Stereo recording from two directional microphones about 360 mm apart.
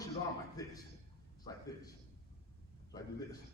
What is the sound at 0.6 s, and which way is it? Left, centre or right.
Speech, centre.